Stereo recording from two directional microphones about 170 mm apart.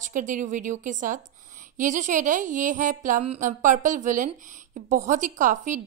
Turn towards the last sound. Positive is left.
turn(degrees=-50)  # may be behind; listen again after turning